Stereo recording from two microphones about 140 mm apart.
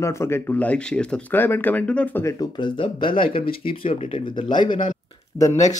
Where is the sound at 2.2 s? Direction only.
30° left (ahead or behind).